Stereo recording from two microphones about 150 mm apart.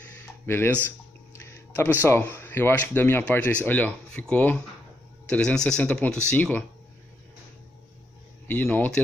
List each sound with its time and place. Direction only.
0.2 s a sound: 15° left (ahead or behind)
2.0 s speech: 15° left (ahead or behind)
8.5 s speech: 10° left (ahead or behind)